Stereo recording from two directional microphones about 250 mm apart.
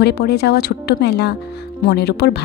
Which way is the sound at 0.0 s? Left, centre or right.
Left.